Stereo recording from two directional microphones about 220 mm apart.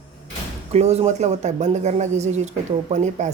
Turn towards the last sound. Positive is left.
turn(degrees=-30)  # may be behind; listen again after turning